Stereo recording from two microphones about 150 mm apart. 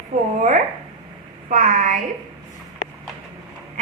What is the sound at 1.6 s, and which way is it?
Speech, 55° right (ahead or behind).